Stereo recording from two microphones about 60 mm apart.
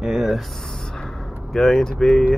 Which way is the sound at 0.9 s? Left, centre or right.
Centre.